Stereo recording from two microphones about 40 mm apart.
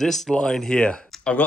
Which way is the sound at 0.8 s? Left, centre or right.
Left.